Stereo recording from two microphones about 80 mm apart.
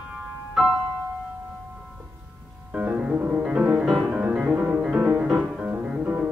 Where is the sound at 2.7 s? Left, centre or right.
Right.